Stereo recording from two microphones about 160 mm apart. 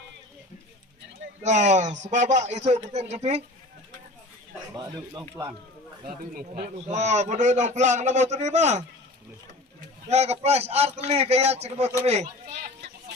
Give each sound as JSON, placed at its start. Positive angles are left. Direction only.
{"t": 1.4, "sound": "a man's voice", "side_deg": -45}
{"t": 6.3, "sound": "speech", "side_deg": -60}
{"t": 6.8, "sound": "a man's voice", "side_deg": -45}
{"t": 10.1, "sound": "a man's voice", "side_deg": -40}